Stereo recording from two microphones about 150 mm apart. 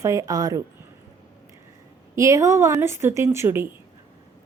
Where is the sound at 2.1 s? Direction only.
20° right (ahead or behind).